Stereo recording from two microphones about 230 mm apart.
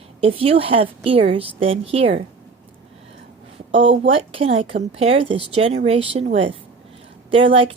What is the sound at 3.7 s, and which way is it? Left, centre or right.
Speech, right.